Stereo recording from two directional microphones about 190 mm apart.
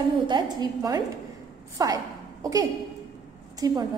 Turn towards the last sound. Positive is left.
turn(degrees=-20)  # may be behind; listen again after turning